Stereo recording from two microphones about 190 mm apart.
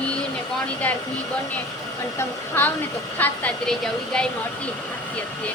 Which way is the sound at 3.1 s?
10° left (ahead or behind).